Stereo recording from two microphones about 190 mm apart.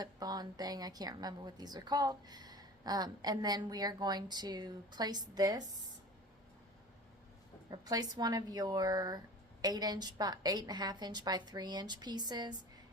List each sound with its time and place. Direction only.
0.0 s a woman's voice: 20° right (ahead or behind)
7.7 s a woman's voice: 20° right (ahead or behind)